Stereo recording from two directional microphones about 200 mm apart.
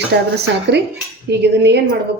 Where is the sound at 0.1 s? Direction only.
55° right (ahead or behind).